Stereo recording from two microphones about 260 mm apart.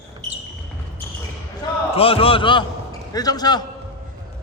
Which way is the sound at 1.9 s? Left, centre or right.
Left.